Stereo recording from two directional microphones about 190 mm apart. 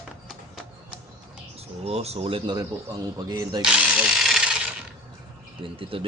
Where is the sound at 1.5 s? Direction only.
35° right (ahead or behind).